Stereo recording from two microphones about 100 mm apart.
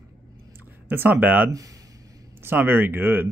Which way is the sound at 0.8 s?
20° right (ahead or behind).